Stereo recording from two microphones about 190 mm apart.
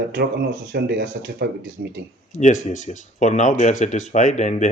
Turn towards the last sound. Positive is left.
turn(degrees=40)  # may be behind; listen again after turning